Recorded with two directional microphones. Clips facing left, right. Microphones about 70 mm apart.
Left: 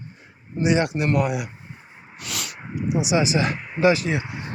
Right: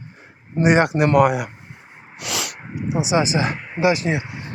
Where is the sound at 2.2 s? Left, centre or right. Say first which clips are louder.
Right 5 dB; right.